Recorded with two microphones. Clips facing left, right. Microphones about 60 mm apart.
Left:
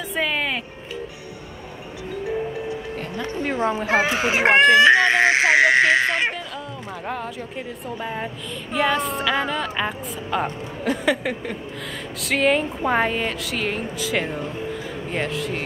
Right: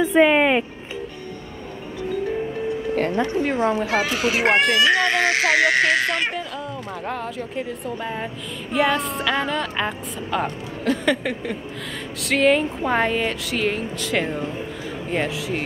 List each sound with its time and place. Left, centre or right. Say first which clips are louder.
0.0 s music: right 9 dB; right
2.2 s music: left 3 dB; centre
3.3 s a woman's voice: left 1 dB; centre
3.7 s speech: left 1 dB; left
7.1 s a woman's voice: even; centre